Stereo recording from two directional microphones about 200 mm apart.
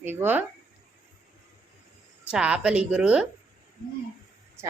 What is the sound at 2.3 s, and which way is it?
Speech, 5° right (ahead or behind).